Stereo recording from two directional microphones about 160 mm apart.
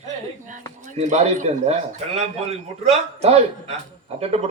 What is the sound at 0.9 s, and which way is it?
A man's voice, 45° right (ahead or behind).